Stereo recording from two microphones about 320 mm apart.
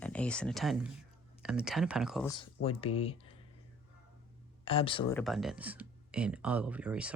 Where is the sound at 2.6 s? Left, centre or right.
Centre.